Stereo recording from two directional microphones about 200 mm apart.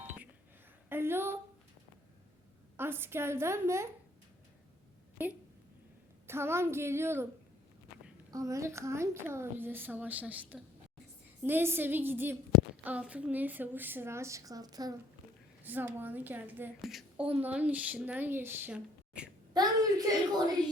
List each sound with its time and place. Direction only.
0.9 s a sound: 10° right (ahead or behind)
2.7 s a woman's voice: 10° right (ahead or behind)
5.1 s a woman's voice: 10° right (ahead or behind)
8.3 s a woman's voice: 15° right (ahead or behind)
19.5 s a woman's voice: 20° right (ahead or behind)